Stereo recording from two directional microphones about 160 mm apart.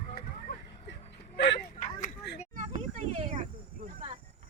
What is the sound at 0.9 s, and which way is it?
Whimper, 90° left.